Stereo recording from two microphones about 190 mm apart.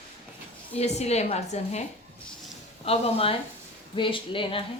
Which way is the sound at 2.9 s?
30° left (ahead or behind).